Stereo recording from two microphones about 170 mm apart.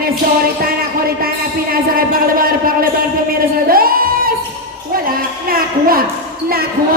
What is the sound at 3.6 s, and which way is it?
Singing, 60° right (ahead or behind).